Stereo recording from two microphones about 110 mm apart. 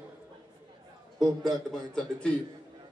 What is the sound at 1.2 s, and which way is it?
A man's voice, centre (ahead or behind).